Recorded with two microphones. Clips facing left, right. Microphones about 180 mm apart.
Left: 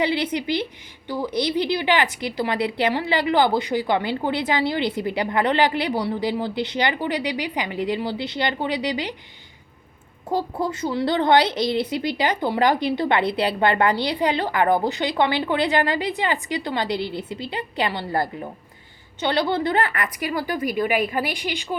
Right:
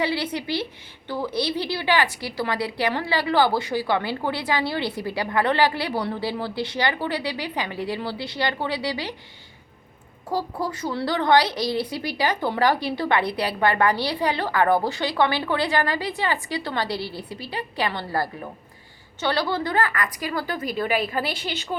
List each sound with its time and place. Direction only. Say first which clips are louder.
0.0 s a woman's voice: left 3 dB; 20° left (ahead or behind)
10.2 s a woman's voice: left 3 dB; 20° left (ahead or behind)